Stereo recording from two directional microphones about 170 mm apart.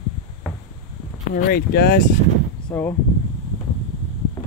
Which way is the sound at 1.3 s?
65° left (ahead or behind).